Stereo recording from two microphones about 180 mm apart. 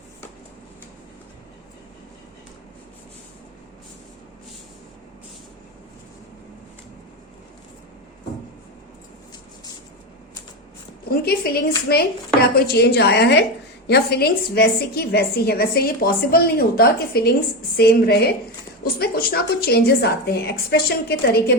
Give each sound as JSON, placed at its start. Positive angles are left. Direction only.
{"t": 11.1, "sound": "a woman's voice", "side_deg": 60}